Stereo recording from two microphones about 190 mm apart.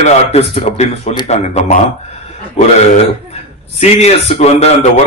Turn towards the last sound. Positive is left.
turn(degrees=35)  # may be behind; listen again after turning